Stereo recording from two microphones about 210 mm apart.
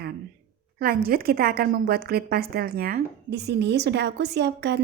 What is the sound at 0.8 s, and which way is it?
A woman's voice, 45° right (ahead or behind).